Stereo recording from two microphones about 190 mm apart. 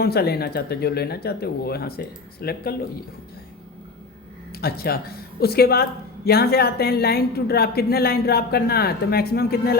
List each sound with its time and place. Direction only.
0.0 s a woman's voice: 55° left (ahead or behind)
4.5 s a woman's voice: 55° left (ahead or behind)